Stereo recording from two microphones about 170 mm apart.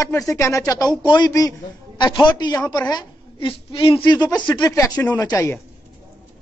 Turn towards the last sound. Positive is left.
turn(degrees=15)  # may be behind; listen again after turning